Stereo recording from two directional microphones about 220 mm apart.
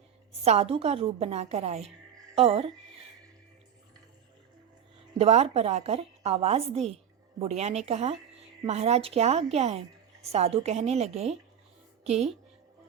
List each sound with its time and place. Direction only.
0.4 s a woman's voice: 30° right (ahead or behind)
5.1 s a woman's voice: 30° right (ahead or behind)